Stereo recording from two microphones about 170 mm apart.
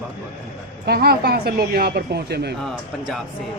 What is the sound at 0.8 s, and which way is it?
A woman's voice, 70° right (ahead or behind).